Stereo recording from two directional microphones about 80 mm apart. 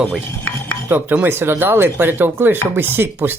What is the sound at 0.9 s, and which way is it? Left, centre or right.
Speech, right.